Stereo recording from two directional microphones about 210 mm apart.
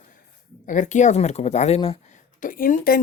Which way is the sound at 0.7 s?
35° left (ahead or behind).